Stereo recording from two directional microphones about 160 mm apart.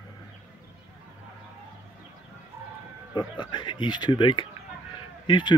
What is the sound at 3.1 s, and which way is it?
Speech, 30° left (ahead or behind).